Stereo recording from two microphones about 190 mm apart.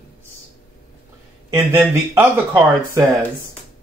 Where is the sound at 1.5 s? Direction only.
10° right (ahead or behind).